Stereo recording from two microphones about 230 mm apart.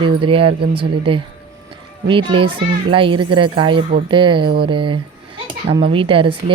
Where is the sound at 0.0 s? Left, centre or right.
Right.